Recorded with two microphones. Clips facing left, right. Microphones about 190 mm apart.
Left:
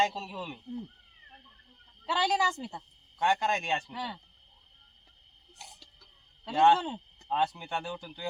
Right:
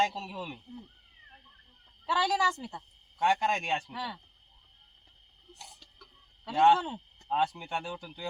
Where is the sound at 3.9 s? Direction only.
15° left (ahead or behind).